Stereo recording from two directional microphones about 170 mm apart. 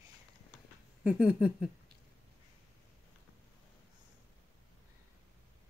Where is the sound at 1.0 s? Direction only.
5° right (ahead or behind).